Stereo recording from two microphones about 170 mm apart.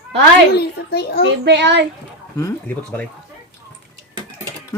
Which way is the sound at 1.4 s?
90° right.